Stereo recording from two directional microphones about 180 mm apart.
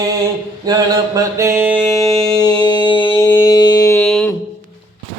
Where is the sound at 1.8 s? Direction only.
20° left (ahead or behind).